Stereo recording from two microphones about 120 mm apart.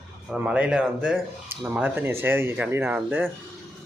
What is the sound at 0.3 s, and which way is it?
Speech, 10° right (ahead or behind).